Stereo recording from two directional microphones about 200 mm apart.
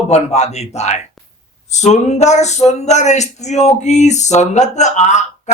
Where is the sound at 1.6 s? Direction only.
35° left (ahead or behind).